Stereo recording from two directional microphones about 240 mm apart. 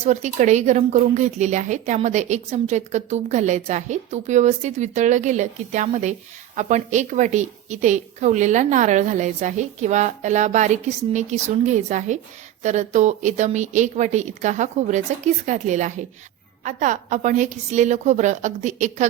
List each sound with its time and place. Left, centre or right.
0.0 s a woman's voice: right